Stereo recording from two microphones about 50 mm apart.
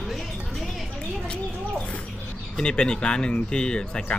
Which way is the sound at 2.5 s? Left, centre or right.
Centre.